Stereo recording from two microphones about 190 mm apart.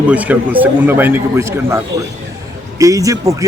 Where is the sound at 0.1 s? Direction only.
10° right (ahead or behind).